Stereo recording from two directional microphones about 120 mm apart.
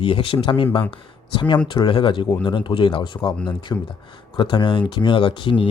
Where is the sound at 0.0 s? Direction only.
45° left (ahead or behind).